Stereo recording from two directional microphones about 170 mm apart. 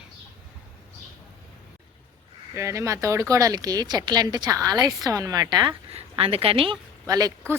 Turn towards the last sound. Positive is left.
turn(degrees=-20)  # may be behind; listen again after turning